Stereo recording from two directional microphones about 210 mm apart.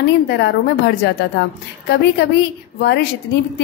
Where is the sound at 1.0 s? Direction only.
55° left (ahead or behind).